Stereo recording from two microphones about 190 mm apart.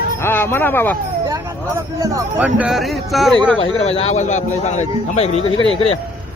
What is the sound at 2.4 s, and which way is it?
Speech, 5° right (ahead or behind).